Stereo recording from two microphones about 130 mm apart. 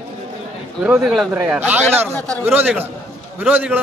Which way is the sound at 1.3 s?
10° right (ahead or behind).